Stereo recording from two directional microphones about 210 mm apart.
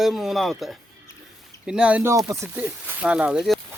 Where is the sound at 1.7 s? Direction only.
5° right (ahead or behind).